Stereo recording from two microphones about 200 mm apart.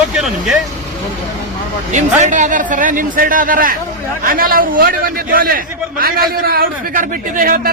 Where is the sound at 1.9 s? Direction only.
35° right (ahead or behind).